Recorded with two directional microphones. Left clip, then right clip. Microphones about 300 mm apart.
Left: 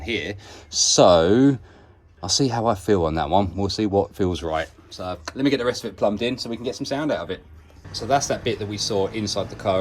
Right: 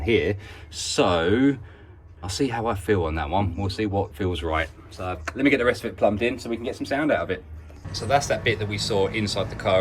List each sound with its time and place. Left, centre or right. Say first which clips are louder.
0.0 s speech: right 5 dB; centre
0.9 s speech: left 6 dB; centre